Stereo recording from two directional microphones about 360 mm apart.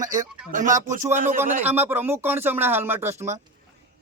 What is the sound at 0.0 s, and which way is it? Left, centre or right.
Speech, right.